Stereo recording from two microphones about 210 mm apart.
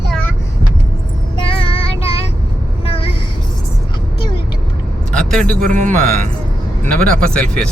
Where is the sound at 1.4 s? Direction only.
25° left (ahead or behind).